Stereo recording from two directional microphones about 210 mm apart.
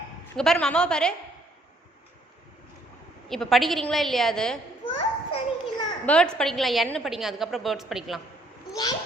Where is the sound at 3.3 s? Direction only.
Centre (ahead or behind).